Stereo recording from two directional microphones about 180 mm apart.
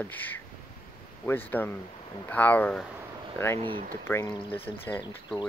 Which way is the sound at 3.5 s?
25° right (ahead or behind).